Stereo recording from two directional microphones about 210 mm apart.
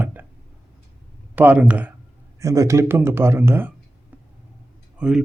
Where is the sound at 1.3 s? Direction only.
5° right (ahead or behind).